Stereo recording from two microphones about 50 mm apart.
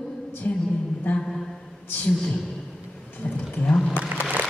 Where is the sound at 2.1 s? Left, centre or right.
Left.